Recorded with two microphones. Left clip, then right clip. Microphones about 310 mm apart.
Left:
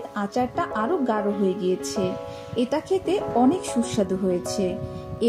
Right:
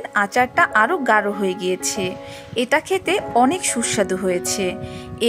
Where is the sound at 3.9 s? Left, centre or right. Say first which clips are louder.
Right 6 dB; right.